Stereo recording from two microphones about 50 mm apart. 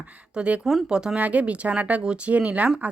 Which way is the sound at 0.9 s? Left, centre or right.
Centre.